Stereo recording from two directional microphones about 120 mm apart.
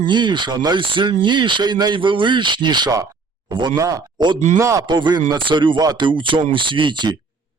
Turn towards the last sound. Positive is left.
turn(degrees=-40)  # may be behind; listen again after turning